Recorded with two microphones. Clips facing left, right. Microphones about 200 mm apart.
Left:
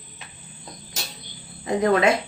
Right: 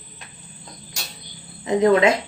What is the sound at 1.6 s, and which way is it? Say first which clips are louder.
Speech: right 3 dB; 20° right (ahead or behind).